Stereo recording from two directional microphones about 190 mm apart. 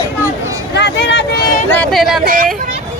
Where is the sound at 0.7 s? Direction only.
60° left (ahead or behind).